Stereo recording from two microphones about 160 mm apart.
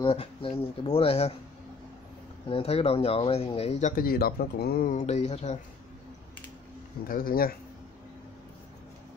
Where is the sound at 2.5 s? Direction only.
35° left (ahead or behind); by 4.9 s 70° left (ahead or behind).